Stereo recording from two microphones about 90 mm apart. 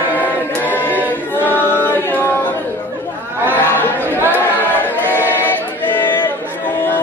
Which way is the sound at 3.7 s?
20° left (ahead or behind).